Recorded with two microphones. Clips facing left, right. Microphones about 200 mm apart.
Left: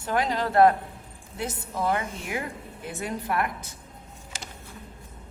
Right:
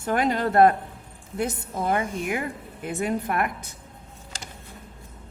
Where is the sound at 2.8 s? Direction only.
55° right (ahead or behind).